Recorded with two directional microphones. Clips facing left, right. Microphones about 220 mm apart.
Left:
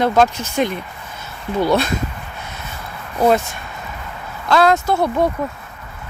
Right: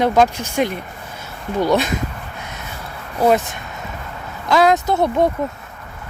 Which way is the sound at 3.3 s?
15° right (ahead or behind).